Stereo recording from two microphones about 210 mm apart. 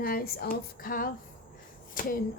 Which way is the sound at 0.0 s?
45° left (ahead or behind).